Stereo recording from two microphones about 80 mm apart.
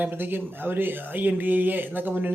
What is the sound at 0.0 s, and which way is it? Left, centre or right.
Speech, right.